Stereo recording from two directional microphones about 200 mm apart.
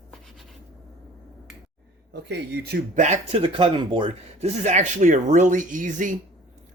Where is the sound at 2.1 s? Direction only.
60° right (ahead or behind).